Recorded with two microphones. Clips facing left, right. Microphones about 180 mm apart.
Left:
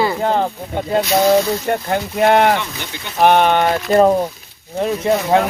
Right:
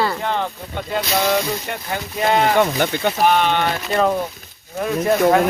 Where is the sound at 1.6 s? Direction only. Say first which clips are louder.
Left 8 dB; 55° left (ahead or behind).